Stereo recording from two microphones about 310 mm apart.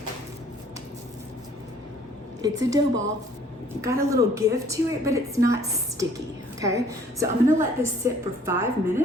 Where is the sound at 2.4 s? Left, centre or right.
Centre.